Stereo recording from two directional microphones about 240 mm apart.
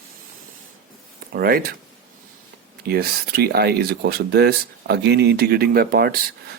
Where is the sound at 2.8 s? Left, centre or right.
Right.